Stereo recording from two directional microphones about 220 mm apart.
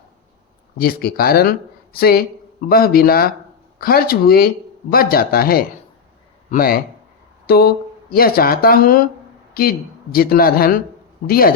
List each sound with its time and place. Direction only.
0.8 s speech: 45° left (ahead or behind)